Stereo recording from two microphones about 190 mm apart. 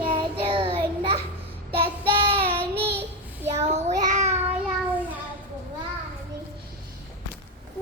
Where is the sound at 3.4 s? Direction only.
35° right (ahead or behind).